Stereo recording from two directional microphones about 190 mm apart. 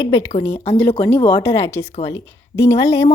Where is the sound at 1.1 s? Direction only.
25° left (ahead or behind).